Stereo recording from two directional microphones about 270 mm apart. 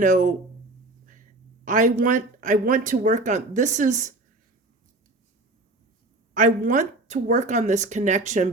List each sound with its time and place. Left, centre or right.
0.0 s speech: right
1.6 s speech: right
6.3 s speech: right